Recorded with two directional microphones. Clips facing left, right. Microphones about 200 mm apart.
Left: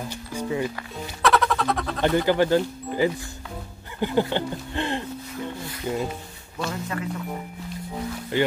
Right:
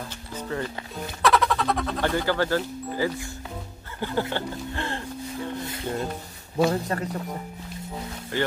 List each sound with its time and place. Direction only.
0.3 s music: 10° left (ahead or behind)
1.2 s music: centre (ahead or behind)
2.0 s speech: 15° left (ahead or behind)
5.9 s speech: 5° left (ahead or behind)
6.7 s speech: 40° right (ahead or behind)
8.3 s speech: 20° left (ahead or behind)